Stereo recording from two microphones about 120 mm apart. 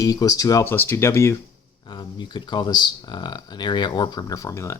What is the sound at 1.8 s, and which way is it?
Speech, 40° left (ahead or behind).